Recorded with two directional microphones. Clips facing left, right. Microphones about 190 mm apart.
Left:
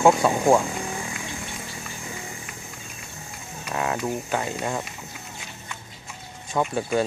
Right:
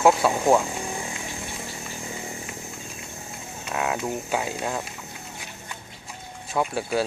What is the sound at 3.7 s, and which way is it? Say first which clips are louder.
Speech: left 1 dB; 5° right (ahead or behind).